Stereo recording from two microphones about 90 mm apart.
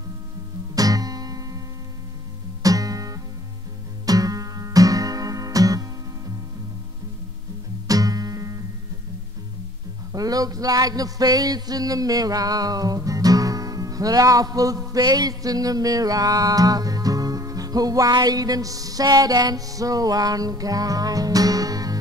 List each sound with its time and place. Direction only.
0.7 s music: 40° right (ahead or behind)
2.6 s music: 40° right (ahead or behind)
4.0 s guitar: 45° right (ahead or behind)
7.9 s music: 45° right (ahead or behind)
10.1 s a sound: 45° right (ahead or behind)